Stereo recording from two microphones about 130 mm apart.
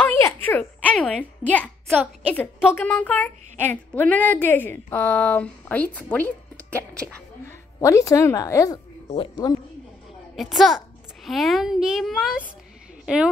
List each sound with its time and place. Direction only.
0.0 s a sound: 15° left (ahead or behind)
2.3 s a woman's voice: 10° left (ahead or behind)
7.4 s a woman's voice: 20° left (ahead or behind)
9.1 s speech: 40° left (ahead or behind)
10.3 s a woman's voice: centre (ahead or behind)